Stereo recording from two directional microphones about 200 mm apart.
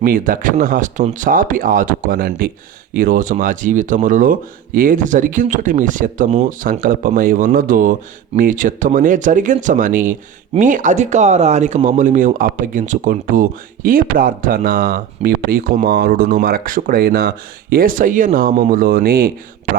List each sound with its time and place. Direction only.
0.0 s speech: 45° right (ahead or behind)